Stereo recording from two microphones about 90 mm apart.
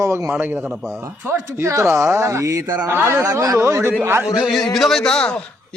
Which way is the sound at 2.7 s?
20° right (ahead or behind).